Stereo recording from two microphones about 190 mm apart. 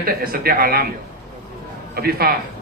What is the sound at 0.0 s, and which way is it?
Speech, 50° right (ahead or behind).